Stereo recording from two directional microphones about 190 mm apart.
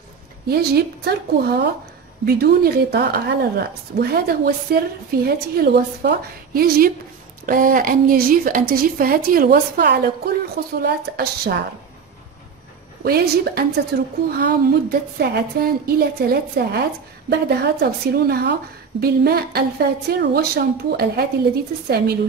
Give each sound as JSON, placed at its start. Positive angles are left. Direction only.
{"t": 0.5, "sound": "a woman's voice", "side_deg": -55}
{"t": 13.0, "sound": "a woman's voice", "side_deg": -55}